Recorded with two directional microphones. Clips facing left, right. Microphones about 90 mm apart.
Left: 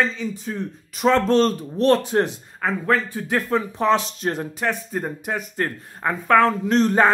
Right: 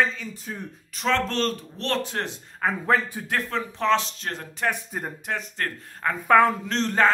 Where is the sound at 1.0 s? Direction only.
15° left (ahead or behind).